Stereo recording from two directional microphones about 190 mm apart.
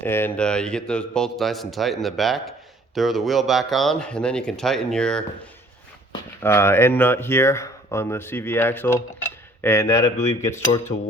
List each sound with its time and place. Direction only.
0.0 s a man's voice: 10° left (ahead or behind)
6.4 s speech: 10° left (ahead or behind)
9.2 s cutlery: 10° left (ahead or behind)
10.9 s a sound: 45° left (ahead or behind)